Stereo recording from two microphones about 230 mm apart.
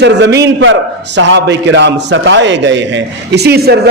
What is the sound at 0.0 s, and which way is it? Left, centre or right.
A man's voice, right.